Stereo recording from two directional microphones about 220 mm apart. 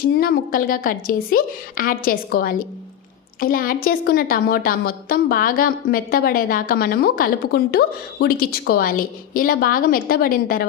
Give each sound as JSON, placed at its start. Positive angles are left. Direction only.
{"t": 0.0, "sound": "a woman's voice", "side_deg": 40}